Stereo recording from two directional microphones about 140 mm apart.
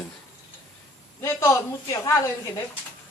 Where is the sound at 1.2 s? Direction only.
20° left (ahead or behind).